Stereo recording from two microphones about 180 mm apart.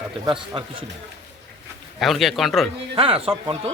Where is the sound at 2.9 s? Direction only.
30° right (ahead or behind).